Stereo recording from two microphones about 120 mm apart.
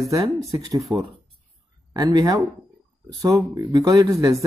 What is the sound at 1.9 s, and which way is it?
Speech, 35° right (ahead or behind).